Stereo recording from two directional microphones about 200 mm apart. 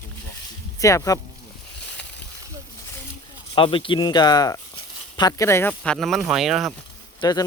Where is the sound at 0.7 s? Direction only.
15° left (ahead or behind).